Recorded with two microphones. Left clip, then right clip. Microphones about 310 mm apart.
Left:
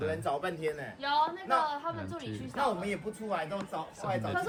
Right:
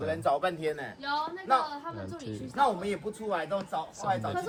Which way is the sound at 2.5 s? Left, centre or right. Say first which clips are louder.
Right 4 dB; right.